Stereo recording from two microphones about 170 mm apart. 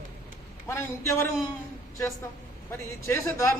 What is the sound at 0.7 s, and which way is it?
Speech, 15° left (ahead or behind).